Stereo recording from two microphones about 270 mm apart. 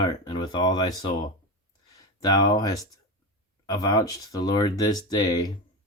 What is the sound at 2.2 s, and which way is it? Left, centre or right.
Speech, centre.